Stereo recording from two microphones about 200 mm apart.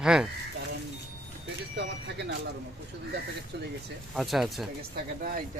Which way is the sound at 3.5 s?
60° right (ahead or behind).